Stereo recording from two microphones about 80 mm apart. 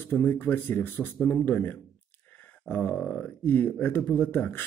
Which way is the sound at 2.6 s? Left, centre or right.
Centre.